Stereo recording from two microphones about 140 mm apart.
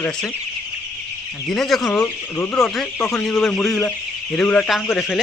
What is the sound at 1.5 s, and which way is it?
Speech, centre (ahead or behind).